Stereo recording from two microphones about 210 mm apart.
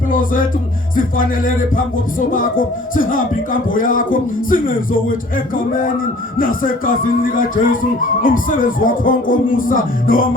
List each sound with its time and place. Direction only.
0.1 s music: 40° left (ahead or behind)
6.4 s music: 40° left (ahead or behind)